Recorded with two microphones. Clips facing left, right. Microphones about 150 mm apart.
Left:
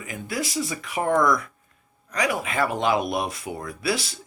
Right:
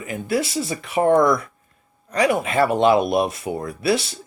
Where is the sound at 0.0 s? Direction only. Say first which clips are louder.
Right 7 dB; 25° right (ahead or behind).